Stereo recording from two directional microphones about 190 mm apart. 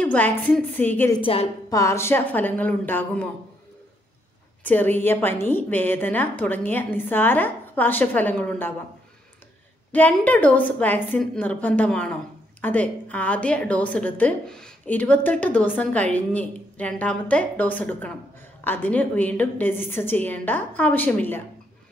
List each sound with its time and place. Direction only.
0.0 s a woman's voice: 10° left (ahead or behind)
1.2 s a woman's voice: 30° left (ahead or behind)
1.7 s a woman's voice: 15° left (ahead or behind)
4.6 s a woman's voice: 10° left (ahead or behind)
9.9 s a woman's voice: 10° left (ahead or behind)